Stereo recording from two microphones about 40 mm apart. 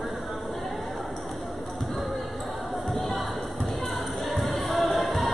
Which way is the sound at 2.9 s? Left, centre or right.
Centre.